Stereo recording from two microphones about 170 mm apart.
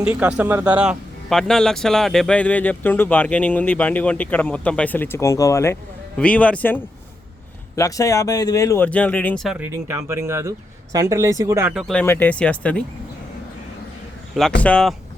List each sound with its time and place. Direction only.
0.0 s speech: 10° right (ahead or behind); by 5.7 s 20° left (ahead or behind)
6.1 s speech: 5° left (ahead or behind)
9.6 s speech: 15° right (ahead or behind)
11.7 s speech: centre (ahead or behind)
12.0 s speech: 10° left (ahead or behind)
14.6 s speech: 5° left (ahead or behind)